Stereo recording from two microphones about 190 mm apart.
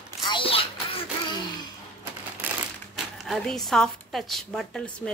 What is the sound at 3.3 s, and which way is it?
A woman's voice, centre (ahead or behind).